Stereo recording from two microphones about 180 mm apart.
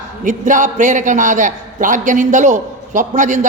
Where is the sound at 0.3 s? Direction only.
45° right (ahead or behind).